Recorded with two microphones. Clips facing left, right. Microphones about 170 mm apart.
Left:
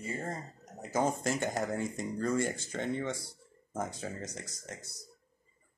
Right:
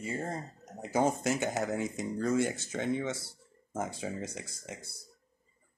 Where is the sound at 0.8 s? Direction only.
15° right (ahead or behind).